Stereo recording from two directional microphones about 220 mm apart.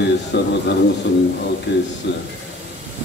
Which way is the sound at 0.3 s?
50° left (ahead or behind).